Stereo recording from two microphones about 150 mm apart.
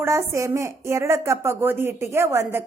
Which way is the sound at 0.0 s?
15° right (ahead or behind).